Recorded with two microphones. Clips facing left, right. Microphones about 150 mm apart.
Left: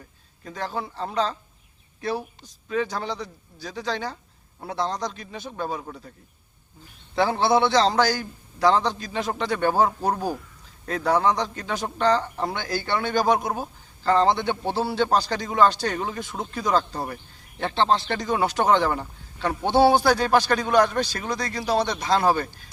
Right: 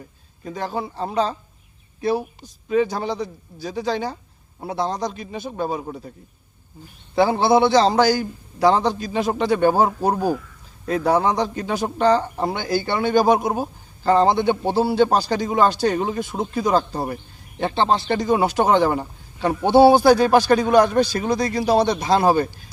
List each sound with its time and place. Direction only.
0.4 s a man's voice: 15° right (ahead or behind)
7.2 s a man's voice: 10° right (ahead or behind); by 16.7 s 25° right (ahead or behind)
17.6 s a man's voice: 10° right (ahead or behind)
21.2 s speech: 30° right (ahead or behind)
21.4 s a man's voice: 15° right (ahead or behind)
21.8 s speech: 30° right (ahead or behind)